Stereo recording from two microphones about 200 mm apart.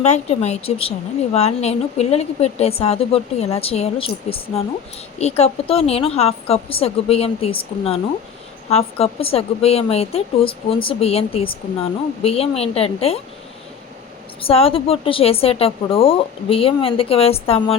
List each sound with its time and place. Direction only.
0.0 s a woman's voice: 35° left (ahead or behind)
8.7 s a woman's voice: 30° left (ahead or behind)
14.4 s a woman's voice: 30° left (ahead or behind)